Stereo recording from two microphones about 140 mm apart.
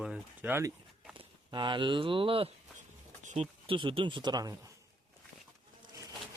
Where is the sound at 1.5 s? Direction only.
35° right (ahead or behind).